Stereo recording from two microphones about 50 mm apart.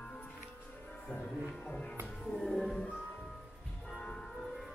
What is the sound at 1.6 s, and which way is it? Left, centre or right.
Music, left.